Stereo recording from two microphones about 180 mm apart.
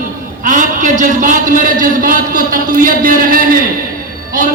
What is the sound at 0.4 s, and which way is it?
A man's voice, 45° right (ahead or behind).